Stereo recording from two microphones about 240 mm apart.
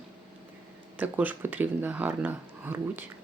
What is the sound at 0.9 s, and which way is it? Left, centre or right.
Speech, centre.